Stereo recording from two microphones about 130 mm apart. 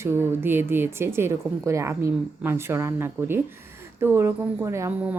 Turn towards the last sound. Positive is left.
turn(degrees=-20)  # may be behind; listen again after turning